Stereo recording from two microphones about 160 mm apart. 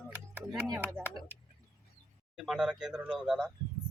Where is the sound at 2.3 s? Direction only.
Centre (ahead or behind).